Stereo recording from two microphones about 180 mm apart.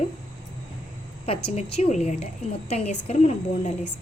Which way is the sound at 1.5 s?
35° left (ahead or behind).